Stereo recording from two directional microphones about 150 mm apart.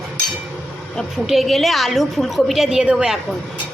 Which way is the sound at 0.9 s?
Centre (ahead or behind).